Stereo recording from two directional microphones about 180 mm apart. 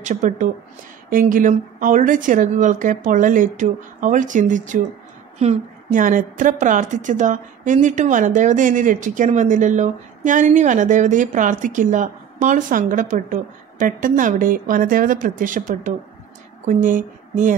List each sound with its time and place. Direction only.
0.0 s a woman's voice: 45° right (ahead or behind)